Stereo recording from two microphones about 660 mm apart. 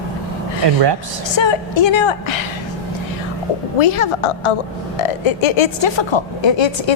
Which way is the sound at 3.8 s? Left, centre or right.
Left.